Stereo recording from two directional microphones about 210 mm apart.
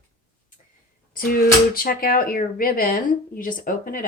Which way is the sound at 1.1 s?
45° left (ahead or behind).